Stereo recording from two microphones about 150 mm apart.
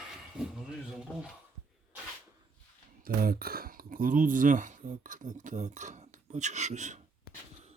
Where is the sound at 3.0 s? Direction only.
85° right; by 7.0 s 50° right (ahead or behind).